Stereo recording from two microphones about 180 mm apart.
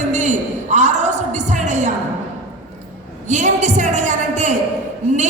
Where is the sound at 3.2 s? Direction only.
40° right (ahead or behind).